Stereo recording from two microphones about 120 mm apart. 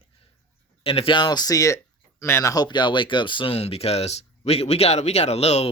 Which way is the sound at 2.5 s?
35° left (ahead or behind).